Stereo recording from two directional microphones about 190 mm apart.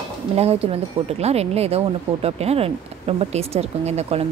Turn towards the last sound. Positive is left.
turn(degrees=-35)  # may be behind; listen again after turning